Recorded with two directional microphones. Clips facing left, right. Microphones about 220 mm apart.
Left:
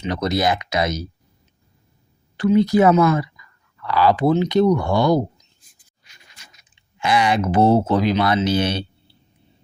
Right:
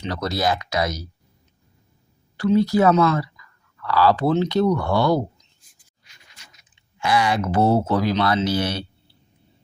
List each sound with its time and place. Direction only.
0.1 s speech: 20° left (ahead or behind)
2.4 s speech: 20° left (ahead or behind)
7.0 s speech: 20° left (ahead or behind)